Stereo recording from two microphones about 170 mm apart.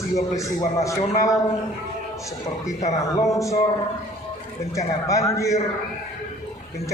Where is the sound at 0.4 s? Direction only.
20° left (ahead or behind).